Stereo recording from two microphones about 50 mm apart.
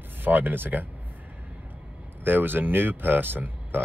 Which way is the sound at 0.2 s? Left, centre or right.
Right.